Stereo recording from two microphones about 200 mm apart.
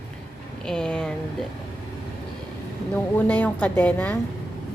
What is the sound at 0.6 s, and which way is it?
Speech, 5° left (ahead or behind).